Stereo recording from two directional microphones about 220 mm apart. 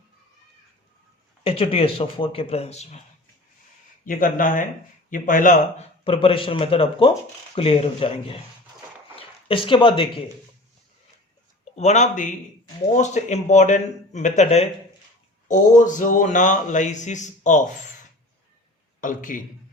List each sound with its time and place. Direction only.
1.5 s speech: 25° left (ahead or behind)
4.0 s a man's voice: 40° left (ahead or behind)
6.1 s speech: 25° left (ahead or behind)
11.7 s a man's voice: 30° left (ahead or behind)
18.9 s a man's voice: 35° left (ahead or behind)